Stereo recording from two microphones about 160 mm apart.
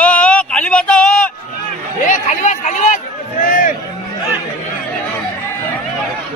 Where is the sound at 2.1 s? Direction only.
50° left (ahead or behind).